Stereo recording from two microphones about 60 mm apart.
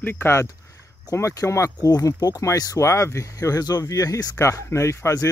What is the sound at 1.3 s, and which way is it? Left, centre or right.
Speech, left.